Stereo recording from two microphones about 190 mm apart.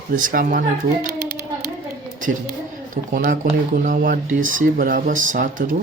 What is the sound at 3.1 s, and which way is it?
Speech, 50° right (ahead or behind).